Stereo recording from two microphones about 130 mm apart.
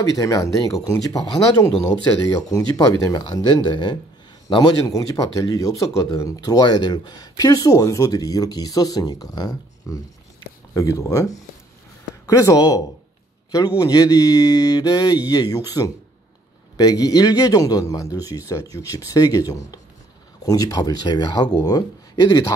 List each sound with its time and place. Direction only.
0.0 s speech: 25° left (ahead or behind)
2.2 s speech: 25° left (ahead or behind)